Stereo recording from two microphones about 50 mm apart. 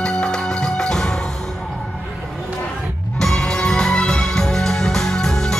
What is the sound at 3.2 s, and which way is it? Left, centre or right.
Music, centre.